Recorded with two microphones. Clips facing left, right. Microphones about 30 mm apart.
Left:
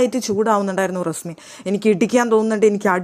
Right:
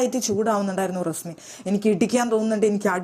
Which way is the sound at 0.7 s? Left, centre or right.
Left.